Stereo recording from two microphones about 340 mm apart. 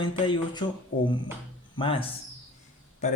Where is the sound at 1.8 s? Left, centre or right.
Centre.